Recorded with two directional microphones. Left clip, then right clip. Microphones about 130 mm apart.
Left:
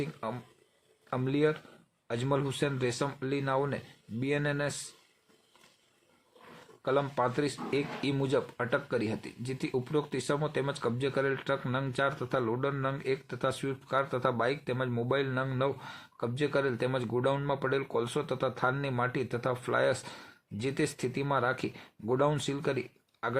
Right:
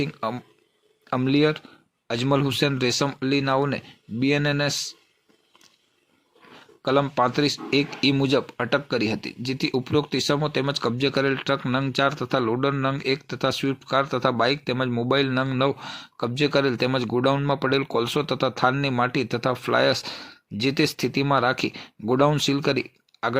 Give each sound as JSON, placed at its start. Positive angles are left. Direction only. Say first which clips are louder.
{"t": 0.0, "sound": "speech", "louder": "right 9 dB", "side_deg": -35}
{"t": 6.8, "sound": "speech", "louder": "right 8 dB", "side_deg": -30}